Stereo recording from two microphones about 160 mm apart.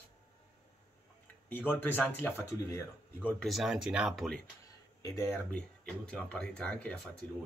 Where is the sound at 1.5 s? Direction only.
10° left (ahead or behind).